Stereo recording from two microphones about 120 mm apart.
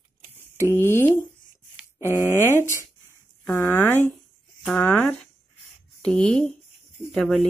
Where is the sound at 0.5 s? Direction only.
20° left (ahead or behind).